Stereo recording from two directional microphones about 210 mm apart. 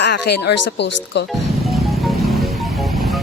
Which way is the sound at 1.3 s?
Centre (ahead or behind).